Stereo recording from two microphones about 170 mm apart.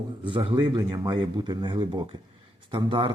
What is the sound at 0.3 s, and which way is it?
Speech, 30° right (ahead or behind).